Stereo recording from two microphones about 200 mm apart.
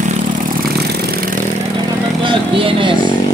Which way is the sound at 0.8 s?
55° right (ahead or behind).